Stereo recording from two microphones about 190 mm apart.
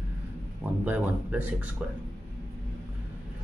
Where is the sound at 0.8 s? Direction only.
10° right (ahead or behind).